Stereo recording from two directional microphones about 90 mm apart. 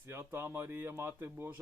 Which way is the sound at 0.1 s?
25° right (ahead or behind).